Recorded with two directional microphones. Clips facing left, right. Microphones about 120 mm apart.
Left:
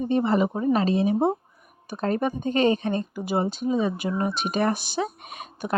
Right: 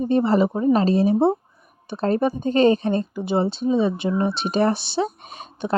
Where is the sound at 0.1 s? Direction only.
35° right (ahead or behind).